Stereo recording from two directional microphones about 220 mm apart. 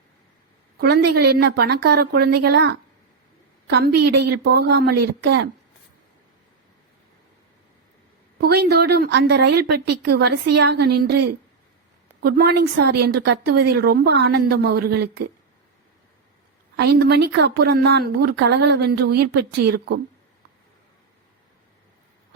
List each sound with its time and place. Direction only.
0.8 s a woman's voice: 45° right (ahead or behind)
8.4 s a woman's voice: 45° right (ahead or behind)
12.2 s a woman's voice: 45° right (ahead or behind)
16.7 s a woman's voice: 50° right (ahead or behind)